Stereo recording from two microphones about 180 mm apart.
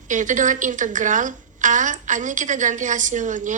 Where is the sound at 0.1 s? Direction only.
45° right (ahead or behind).